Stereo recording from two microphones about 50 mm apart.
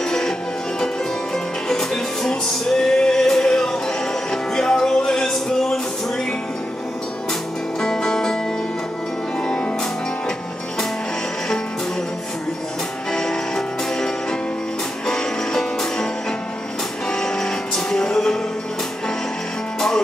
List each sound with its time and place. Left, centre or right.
0.0 s music: centre
1.3 s music: centre
7.8 s music: centre
9.5 s music: centre
13.1 s music: centre